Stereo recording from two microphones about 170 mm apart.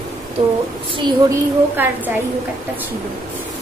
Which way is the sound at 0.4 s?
40° right (ahead or behind).